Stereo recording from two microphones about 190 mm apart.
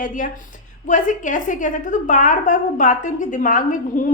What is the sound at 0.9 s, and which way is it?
A woman's voice, 40° left (ahead or behind).